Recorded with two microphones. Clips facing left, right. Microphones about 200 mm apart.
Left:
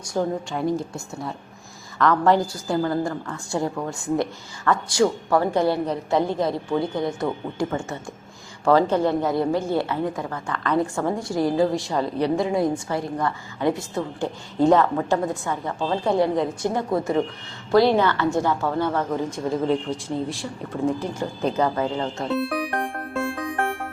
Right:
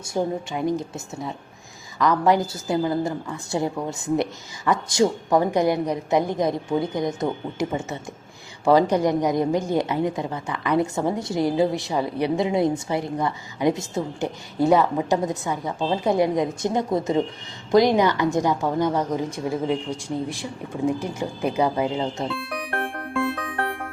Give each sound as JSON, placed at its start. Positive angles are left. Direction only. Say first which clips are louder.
{"t": 0.1, "sound": "a woman's voice", "louder": "even", "side_deg": -15}
{"t": 2.0, "sound": "a woman's voice", "louder": "left 1 dB", "side_deg": -15}
{"t": 22.4, "sound": "speech", "louder": "left 7 dB", "side_deg": 30}